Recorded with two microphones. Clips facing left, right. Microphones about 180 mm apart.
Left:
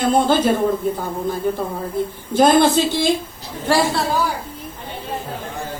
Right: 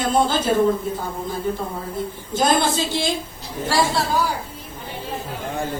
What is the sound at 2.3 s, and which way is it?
Speech, 60° left (ahead or behind).